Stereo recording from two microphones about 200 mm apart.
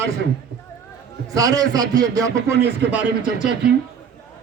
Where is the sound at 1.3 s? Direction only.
15° right (ahead or behind).